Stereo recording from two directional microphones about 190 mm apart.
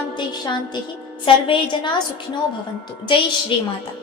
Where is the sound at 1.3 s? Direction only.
30° left (ahead or behind).